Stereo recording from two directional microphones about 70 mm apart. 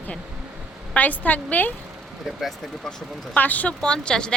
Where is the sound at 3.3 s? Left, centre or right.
Left.